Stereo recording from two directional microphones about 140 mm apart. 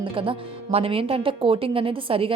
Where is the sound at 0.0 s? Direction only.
40° right (ahead or behind).